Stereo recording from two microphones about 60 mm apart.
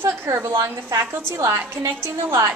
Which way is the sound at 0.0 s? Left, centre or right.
Right.